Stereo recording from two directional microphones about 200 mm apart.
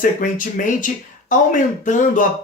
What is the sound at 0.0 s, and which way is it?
Speech, 40° left (ahead or behind).